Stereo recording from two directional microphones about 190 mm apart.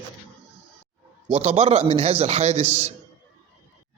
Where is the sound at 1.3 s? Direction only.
35° right (ahead or behind).